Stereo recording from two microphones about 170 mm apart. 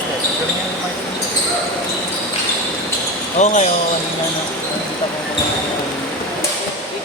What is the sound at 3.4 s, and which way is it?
Speech, 45° left (ahead or behind).